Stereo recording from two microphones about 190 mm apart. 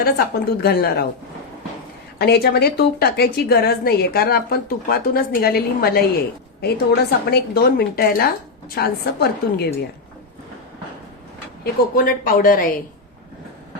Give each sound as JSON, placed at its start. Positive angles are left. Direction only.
{"t": 0.6, "sound": "a woman's voice", "side_deg": 55}
{"t": 2.1, "sound": "a woman's voice", "side_deg": 60}
{"t": 11.6, "sound": "a woman's voice", "side_deg": 50}